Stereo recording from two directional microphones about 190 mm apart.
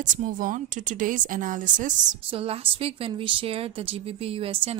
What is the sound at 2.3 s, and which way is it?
Speech, 30° right (ahead or behind).